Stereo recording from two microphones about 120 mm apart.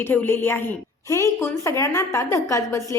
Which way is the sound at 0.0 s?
15° left (ahead or behind).